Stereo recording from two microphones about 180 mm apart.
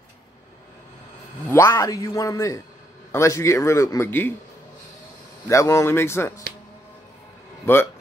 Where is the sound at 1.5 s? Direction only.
15° left (ahead or behind).